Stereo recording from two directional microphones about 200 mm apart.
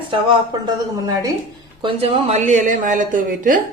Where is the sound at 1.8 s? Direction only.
30° right (ahead or behind).